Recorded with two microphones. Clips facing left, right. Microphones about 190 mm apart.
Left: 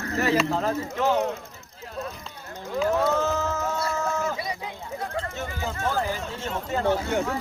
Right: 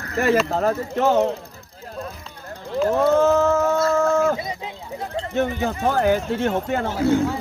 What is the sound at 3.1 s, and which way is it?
Chicken, 55° right (ahead or behind).